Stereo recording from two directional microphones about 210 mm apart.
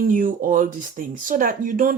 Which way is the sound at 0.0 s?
40° right (ahead or behind).